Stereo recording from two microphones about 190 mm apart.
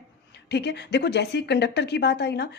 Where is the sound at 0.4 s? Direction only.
60° left (ahead or behind).